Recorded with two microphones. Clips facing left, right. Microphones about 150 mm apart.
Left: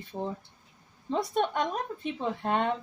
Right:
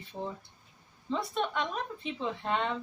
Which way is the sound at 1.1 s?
45° left (ahead or behind).